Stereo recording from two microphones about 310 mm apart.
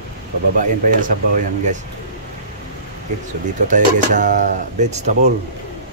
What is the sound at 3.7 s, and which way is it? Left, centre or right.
Speech, right.